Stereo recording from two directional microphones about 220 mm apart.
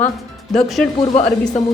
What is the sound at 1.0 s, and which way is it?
Speech, 20° left (ahead or behind).